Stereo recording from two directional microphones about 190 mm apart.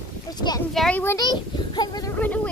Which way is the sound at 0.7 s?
5° left (ahead or behind).